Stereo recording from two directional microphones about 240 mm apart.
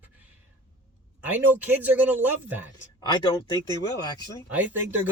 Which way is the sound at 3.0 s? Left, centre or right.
Centre.